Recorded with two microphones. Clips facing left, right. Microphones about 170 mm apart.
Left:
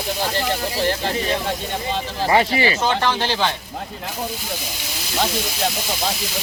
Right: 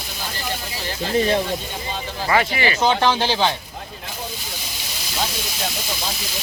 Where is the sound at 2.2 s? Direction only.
30° left (ahead or behind).